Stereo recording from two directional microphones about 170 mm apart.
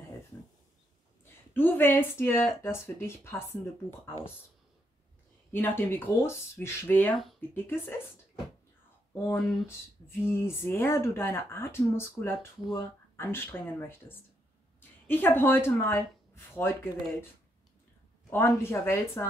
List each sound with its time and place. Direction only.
1.5 s speech: 10° left (ahead or behind)
5.5 s speech: 10° left (ahead or behind)
7.2 s speech: centre (ahead or behind)
7.5 s speech: 15° left (ahead or behind)
9.1 s a woman's voice: 15° left (ahead or behind)
18.3 s speech: 15° left (ahead or behind)